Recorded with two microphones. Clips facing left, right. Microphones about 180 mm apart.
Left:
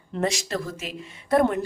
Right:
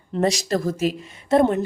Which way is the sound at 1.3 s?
25° right (ahead or behind).